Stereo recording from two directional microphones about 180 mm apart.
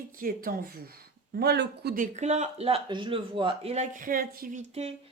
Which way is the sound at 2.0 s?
40° right (ahead or behind).